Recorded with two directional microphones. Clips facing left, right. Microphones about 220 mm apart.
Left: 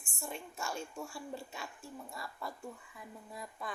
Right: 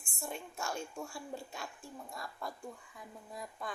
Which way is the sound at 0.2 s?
Centre (ahead or behind).